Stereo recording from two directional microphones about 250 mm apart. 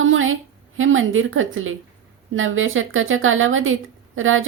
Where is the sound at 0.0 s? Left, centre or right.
Right.